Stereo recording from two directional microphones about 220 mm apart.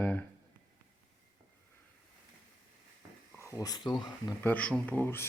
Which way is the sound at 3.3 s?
15° left (ahead or behind).